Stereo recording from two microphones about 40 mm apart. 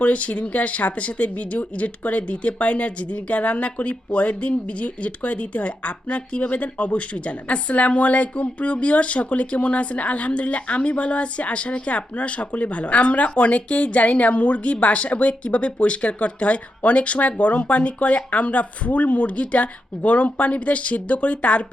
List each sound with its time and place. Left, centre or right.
0.0 s speech: left